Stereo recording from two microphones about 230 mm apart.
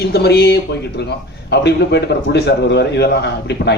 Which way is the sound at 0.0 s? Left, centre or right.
Left.